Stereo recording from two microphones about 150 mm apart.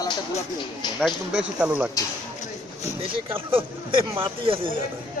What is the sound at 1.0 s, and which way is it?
Speech, centre (ahead or behind).